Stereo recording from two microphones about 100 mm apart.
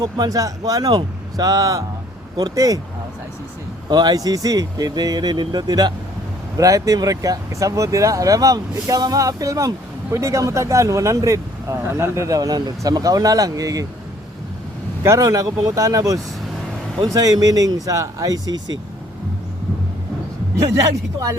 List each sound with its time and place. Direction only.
0.0 s speech: 40° right (ahead or behind)
3.8 s speech: 45° right (ahead or behind)
15.0 s speech: 35° right (ahead or behind)